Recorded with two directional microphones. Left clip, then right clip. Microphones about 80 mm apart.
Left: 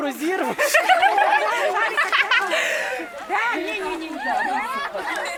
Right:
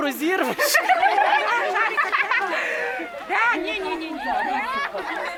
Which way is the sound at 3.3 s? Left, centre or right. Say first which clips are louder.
Right 2 dB; right.